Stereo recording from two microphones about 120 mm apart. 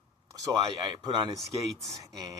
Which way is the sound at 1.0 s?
40° right (ahead or behind).